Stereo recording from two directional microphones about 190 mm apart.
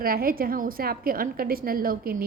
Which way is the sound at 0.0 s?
50° right (ahead or behind).